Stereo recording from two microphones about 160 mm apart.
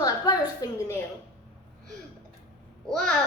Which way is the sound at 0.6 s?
25° left (ahead or behind).